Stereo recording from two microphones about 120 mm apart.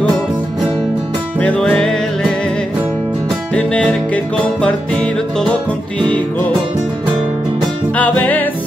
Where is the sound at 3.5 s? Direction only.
10° left (ahead or behind).